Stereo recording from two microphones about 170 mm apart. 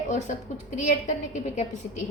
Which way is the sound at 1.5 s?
45° left (ahead or behind).